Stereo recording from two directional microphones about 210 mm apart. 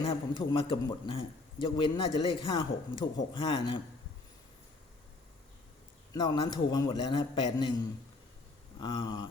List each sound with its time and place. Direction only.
0.0 s a man's voice: 25° left (ahead or behind)
6.1 s a man's voice: 20° left (ahead or behind)
8.8 s a man's voice: 20° left (ahead or behind)